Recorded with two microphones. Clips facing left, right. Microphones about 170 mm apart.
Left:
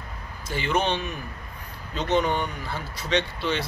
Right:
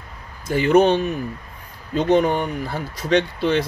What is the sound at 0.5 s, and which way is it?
Speech, 45° right (ahead or behind).